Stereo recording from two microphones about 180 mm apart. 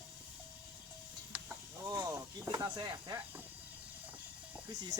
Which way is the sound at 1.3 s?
10° right (ahead or behind).